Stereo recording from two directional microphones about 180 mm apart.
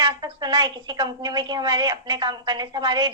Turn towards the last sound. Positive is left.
turn(degrees=-25)  # may be behind; listen again after turning